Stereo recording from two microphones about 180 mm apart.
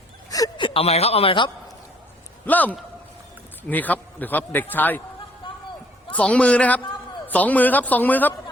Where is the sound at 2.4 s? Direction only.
10° left (ahead or behind).